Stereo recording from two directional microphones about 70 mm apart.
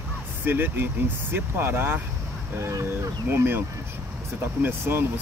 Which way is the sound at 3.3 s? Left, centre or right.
Right.